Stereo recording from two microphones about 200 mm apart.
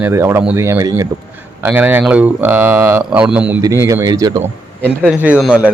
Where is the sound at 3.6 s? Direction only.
15° right (ahead or behind).